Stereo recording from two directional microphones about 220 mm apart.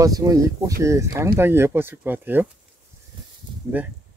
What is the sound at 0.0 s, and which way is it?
Speech, 15° right (ahead or behind).